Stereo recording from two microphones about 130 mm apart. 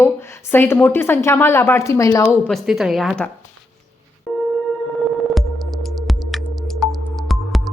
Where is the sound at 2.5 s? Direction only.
5° right (ahead or behind).